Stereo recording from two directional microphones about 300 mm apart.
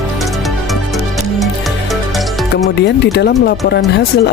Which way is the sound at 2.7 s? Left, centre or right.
Left.